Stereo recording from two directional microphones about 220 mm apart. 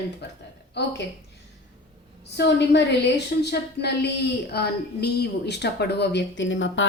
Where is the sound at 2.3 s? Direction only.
50° left (ahead or behind).